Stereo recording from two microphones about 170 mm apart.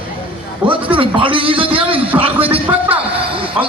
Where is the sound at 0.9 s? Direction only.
30° right (ahead or behind).